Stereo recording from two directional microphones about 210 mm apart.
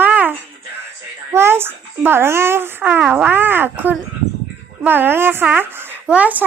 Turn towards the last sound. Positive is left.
turn(degrees=-5)  # may be behind; listen again after turning